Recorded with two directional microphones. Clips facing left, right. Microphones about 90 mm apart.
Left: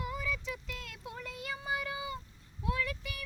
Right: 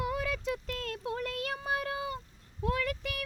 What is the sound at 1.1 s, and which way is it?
Child singing, 70° right (ahead or behind).